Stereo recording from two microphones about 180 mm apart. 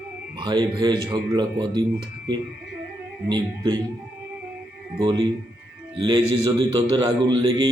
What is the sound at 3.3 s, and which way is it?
Speech, 25° right (ahead or behind).